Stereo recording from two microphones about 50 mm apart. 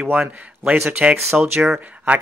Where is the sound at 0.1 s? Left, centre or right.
Right.